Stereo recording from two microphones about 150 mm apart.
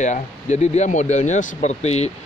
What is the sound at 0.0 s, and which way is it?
Speech, 50° left (ahead or behind).